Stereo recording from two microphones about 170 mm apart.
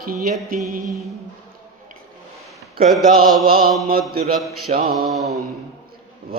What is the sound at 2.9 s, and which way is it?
Mantra, centre (ahead or behind).